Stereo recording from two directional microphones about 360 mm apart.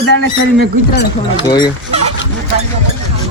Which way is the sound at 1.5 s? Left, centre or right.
Centre.